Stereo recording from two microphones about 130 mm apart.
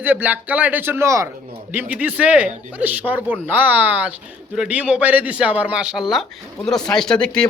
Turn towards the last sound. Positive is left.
turn(degrees=5)  # may be behind; listen again after turning